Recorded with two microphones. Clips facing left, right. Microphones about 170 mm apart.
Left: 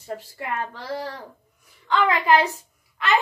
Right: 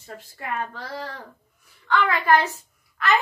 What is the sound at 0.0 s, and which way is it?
A woman's voice, 10° left (ahead or behind).